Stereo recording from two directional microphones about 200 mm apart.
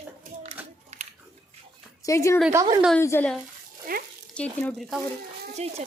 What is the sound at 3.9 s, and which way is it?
Speech, 45° right (ahead or behind).